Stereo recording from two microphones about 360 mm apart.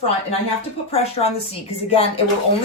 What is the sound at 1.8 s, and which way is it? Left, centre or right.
Speech, centre.